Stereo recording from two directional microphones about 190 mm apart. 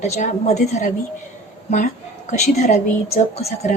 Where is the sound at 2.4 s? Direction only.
35° left (ahead or behind).